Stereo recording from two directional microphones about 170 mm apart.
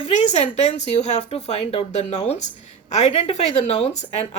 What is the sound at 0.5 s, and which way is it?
A woman's voice, 40° left (ahead or behind).